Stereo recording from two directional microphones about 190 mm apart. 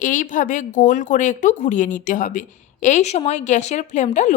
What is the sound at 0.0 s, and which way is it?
Speech, 45° left (ahead or behind).